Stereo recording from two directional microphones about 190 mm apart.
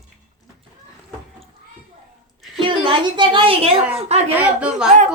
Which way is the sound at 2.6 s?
25° right (ahead or behind).